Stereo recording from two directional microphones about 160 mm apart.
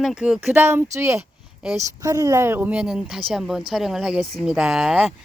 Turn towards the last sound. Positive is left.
turn(degrees=-5)  # may be behind; listen again after turning